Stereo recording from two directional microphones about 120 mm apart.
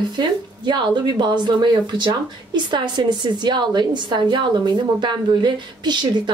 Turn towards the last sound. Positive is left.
turn(degrees=-40)  # may be behind; listen again after turning